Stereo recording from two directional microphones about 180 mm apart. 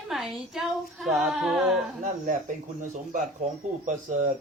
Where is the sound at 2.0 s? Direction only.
45° right (ahead or behind).